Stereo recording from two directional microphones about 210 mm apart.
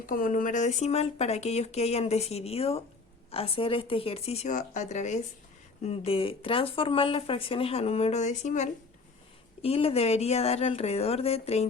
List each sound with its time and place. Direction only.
0.0 s speech: 40° left (ahead or behind)